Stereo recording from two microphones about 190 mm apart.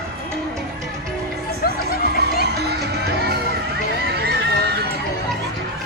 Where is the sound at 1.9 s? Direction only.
50° left (ahead or behind).